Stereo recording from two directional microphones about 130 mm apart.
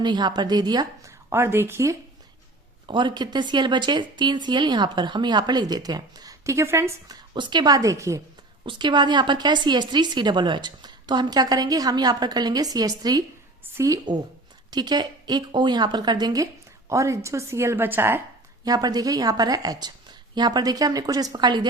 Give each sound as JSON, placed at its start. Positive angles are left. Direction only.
{"t": 0.0, "sound": "a woman's voice", "side_deg": -35}
{"t": 1.3, "sound": "a woman's voice", "side_deg": -15}
{"t": 2.8, "sound": "a woman's voice", "side_deg": -35}
{"t": 7.3, "sound": "a woman's voice", "side_deg": -35}
{"t": 8.6, "sound": "a woman's voice", "side_deg": -35}
{"t": 18.6, "sound": "a woman's voice", "side_deg": -30}